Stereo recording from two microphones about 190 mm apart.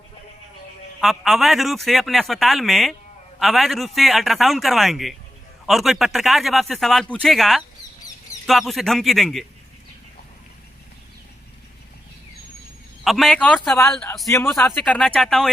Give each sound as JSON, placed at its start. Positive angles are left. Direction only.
{"t": 1.0, "sound": "speech", "side_deg": 0}
{"t": 13.1, "sound": "speech", "side_deg": 0}